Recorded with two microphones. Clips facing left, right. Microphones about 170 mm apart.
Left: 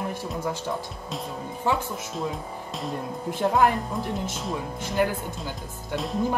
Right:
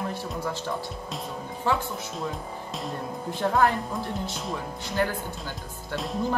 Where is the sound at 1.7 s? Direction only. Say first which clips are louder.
Left 1 dB; 15° left (ahead or behind).